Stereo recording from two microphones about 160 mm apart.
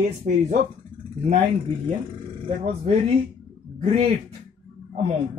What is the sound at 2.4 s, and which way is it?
Speech, 35° right (ahead or behind).